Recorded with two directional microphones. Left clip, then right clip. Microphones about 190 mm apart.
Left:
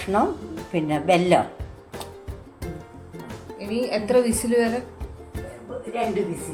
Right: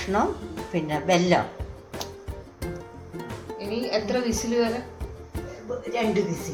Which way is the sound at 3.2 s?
Centre (ahead or behind).